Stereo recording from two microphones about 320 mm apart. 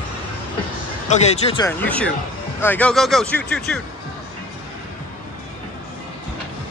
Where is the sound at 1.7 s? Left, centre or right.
Centre.